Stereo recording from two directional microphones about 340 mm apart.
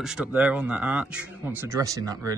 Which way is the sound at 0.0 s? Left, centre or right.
Centre.